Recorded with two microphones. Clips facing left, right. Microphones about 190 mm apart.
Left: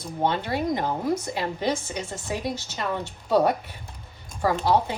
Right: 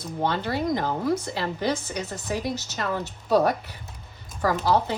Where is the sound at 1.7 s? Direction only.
25° left (ahead or behind).